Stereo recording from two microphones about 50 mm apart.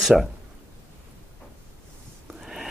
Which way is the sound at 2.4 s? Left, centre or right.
Centre.